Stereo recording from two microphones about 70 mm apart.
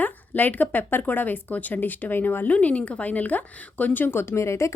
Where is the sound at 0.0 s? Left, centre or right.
Left.